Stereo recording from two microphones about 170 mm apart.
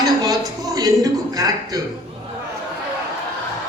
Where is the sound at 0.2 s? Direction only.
20° right (ahead or behind).